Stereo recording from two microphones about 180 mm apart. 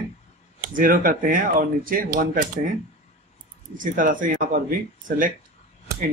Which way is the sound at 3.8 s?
50° right (ahead or behind).